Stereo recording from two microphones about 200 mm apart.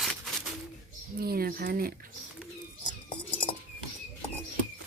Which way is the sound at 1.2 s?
50° right (ahead or behind).